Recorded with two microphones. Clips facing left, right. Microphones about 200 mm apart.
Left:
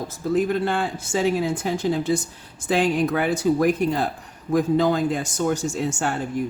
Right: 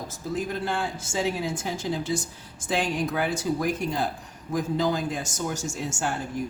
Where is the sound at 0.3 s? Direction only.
60° left (ahead or behind).